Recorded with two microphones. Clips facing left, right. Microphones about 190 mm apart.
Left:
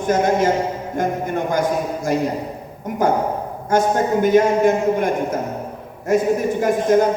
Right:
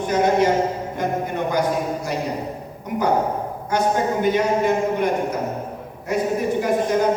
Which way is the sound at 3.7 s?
45° left (ahead or behind).